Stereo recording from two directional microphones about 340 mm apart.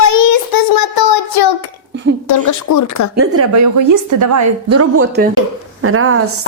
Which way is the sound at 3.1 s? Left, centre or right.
Right.